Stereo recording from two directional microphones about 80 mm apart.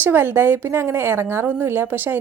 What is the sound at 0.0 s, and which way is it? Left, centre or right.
A woman's voice, right.